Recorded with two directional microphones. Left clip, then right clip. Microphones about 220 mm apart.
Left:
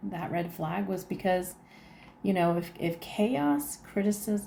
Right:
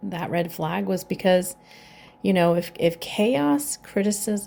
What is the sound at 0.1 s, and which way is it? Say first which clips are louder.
Speech: right 7 dB; 45° right (ahead or behind).